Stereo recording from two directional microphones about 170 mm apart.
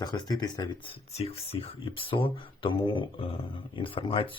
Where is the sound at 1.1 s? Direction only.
35° left (ahead or behind).